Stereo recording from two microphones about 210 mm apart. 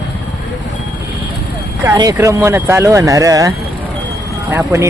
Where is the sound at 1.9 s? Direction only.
15° right (ahead or behind).